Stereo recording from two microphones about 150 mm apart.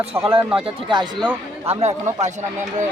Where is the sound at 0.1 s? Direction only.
20° right (ahead or behind).